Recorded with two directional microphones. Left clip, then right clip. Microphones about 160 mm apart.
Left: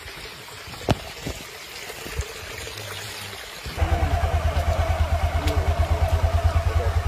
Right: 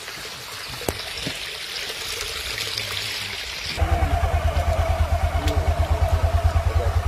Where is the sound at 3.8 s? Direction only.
20° right (ahead or behind).